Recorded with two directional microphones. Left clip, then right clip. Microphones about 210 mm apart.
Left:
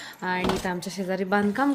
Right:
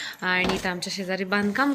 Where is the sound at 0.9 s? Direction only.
20° left (ahead or behind).